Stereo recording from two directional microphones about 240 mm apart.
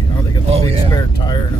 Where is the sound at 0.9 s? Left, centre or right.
Centre.